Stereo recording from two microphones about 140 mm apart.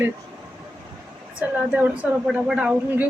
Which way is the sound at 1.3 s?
10° right (ahead or behind).